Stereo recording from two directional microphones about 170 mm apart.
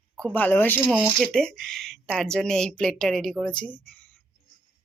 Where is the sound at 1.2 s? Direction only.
5° left (ahead or behind).